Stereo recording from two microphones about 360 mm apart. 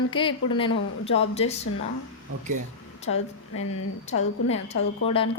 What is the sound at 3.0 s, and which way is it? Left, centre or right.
Speech, left.